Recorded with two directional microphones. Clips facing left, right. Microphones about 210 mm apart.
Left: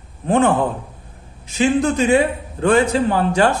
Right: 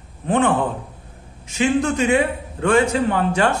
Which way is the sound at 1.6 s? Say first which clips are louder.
Left 2 dB; 35° left (ahead or behind).